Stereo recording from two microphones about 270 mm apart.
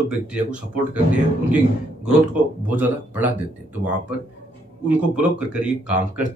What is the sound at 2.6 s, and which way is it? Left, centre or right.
Speech, centre.